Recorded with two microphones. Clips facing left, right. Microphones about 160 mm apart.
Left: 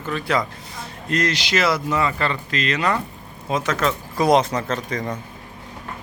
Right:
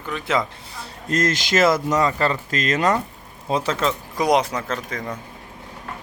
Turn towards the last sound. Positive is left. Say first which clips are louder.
# left 3 dB
turn(degrees=-5)  # may be behind; listen again after turning